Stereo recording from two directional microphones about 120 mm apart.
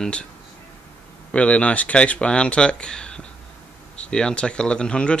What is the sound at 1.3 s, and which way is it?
Speech, 10° left (ahead or behind).